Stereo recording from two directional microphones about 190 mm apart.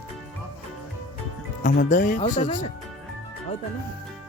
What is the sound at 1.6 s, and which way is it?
Speech, 45° left (ahead or behind).